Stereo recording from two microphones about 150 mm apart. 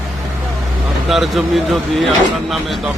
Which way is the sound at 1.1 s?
Centre (ahead or behind).